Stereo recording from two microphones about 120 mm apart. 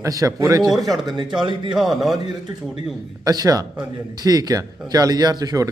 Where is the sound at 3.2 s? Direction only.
30° right (ahead or behind).